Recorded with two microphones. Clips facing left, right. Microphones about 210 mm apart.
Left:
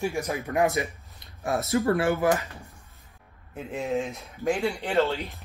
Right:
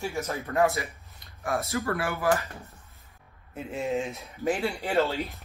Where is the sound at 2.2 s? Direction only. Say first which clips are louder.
Left 2 dB; 15° left (ahead or behind).